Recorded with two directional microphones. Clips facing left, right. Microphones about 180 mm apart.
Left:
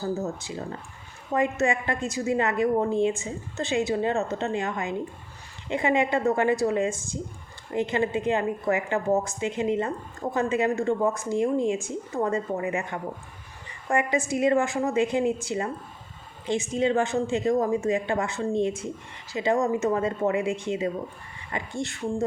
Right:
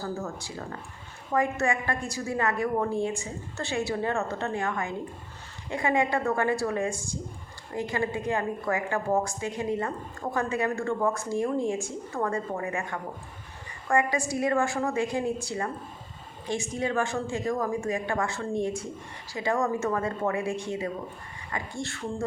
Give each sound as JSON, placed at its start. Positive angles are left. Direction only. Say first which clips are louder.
{"t": 0.0, "sound": "a woman's voice", "louder": "left 4 dB", "side_deg": 20}
{"t": 13.8, "sound": "a woman's voice", "louder": "left 1 dB", "side_deg": 20}